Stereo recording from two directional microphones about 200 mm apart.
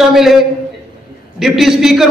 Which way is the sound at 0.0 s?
Centre (ahead or behind).